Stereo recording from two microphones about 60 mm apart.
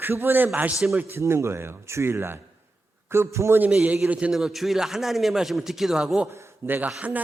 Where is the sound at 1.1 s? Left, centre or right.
Right.